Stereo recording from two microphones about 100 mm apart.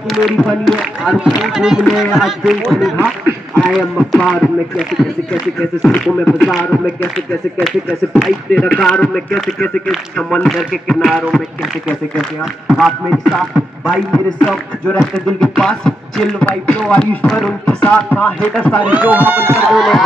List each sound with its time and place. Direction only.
0.1 s speech: centre (ahead or behind)
15.1 s music: 5° left (ahead or behind)
18.9 s speech: 15° right (ahead or behind)
19.7 s speech: centre (ahead or behind)